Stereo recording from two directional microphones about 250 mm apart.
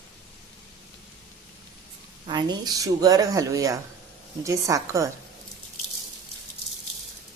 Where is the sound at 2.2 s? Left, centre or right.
Centre.